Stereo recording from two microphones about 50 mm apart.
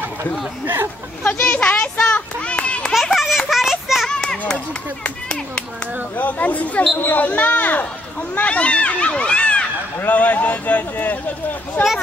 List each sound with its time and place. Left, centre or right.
1.2 s a sound: left
3.2 s children playing: centre
4.1 s children playing: centre
6.1 s speech: left
8.4 s speech: left
9.9 s speech: left